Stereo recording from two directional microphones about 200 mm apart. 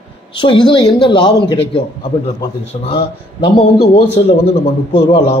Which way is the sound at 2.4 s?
25° left (ahead or behind).